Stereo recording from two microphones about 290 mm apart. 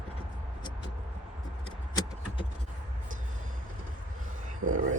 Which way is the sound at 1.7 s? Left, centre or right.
Centre.